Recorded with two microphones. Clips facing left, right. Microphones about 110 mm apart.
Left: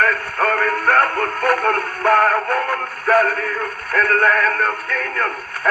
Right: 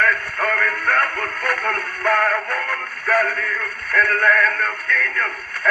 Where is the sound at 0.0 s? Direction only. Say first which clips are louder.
Left 2 dB; 40° left (ahead or behind).